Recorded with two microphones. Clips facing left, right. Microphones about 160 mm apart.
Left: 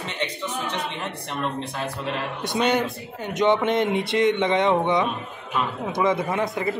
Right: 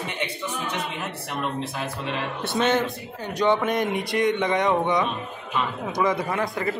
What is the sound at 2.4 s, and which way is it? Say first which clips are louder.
A man's voice: even; 15° left (ahead or behind).